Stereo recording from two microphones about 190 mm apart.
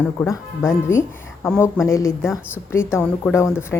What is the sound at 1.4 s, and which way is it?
A woman's voice, 10° left (ahead or behind).